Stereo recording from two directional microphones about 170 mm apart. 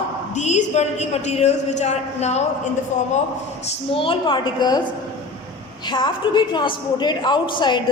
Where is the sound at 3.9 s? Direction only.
30° left (ahead or behind).